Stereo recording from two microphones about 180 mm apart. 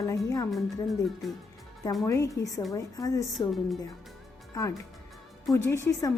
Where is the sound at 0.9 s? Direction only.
Centre (ahead or behind).